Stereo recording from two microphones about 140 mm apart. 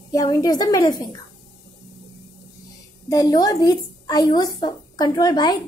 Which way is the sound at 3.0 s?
25° left (ahead or behind).